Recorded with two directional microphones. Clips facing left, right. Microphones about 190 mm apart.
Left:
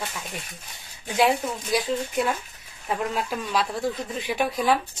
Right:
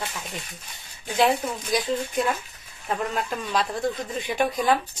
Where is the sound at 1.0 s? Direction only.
5° left (ahead or behind).